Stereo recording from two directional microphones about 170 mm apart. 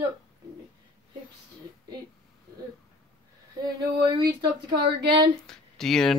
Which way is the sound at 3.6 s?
25° right (ahead or behind).